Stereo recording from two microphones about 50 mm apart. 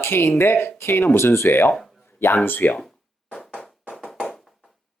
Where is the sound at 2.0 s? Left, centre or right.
Left.